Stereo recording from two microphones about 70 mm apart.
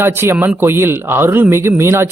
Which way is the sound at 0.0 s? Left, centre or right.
Right.